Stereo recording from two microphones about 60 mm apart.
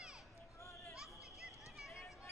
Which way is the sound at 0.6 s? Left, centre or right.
Left.